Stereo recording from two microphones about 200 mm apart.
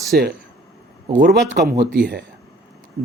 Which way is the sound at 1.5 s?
50° right (ahead or behind).